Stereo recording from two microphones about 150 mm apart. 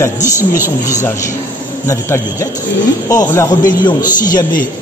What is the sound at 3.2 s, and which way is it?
Speech, 20° left (ahead or behind).